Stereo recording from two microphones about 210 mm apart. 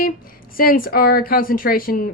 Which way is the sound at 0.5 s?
45° left (ahead or behind).